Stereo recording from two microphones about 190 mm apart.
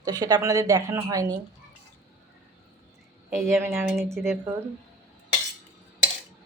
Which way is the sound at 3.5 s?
15° right (ahead or behind).